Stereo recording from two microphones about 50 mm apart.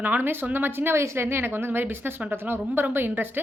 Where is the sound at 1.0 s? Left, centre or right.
Right.